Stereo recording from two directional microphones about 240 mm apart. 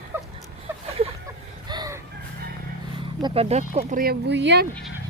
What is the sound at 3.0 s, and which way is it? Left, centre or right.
Speech, right.